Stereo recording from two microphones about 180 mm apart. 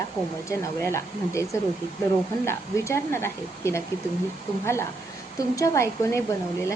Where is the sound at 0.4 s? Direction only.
15° left (ahead or behind).